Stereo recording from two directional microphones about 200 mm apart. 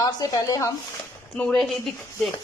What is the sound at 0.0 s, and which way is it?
Speech, 20° left (ahead or behind).